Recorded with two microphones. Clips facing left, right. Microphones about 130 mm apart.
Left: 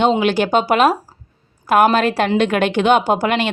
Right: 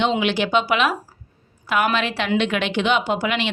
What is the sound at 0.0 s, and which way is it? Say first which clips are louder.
A woman's voice: left 5 dB; 45° left (ahead or behind).